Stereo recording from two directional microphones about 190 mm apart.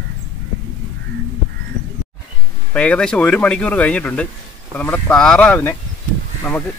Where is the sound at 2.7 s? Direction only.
5° left (ahead or behind).